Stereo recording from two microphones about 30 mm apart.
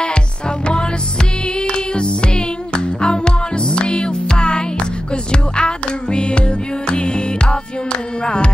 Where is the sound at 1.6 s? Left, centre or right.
Left.